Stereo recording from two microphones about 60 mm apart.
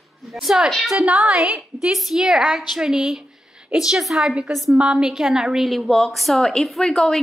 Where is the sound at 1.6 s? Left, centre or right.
Centre.